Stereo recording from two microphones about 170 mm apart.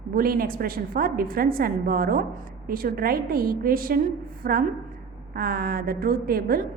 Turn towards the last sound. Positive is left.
turn(degrees=-60)  # may be behind; listen again after turning